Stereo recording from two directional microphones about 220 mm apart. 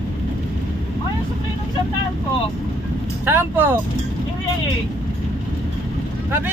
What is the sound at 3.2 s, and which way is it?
Speech, 10° right (ahead or behind).